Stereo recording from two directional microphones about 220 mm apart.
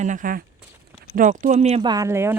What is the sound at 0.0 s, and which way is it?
Speech, 35° right (ahead or behind).